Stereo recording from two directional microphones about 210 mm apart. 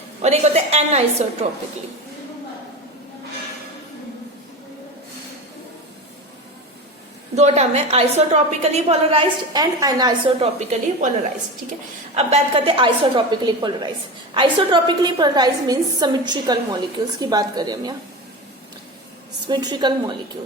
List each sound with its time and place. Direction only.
0.2 s a woman's voice: 30° right (ahead or behind)
7.3 s a woman's voice: 30° right (ahead or behind)
12.1 s a woman's voice: 30° right (ahead or behind)
19.5 s a woman's voice: 20° right (ahead or behind)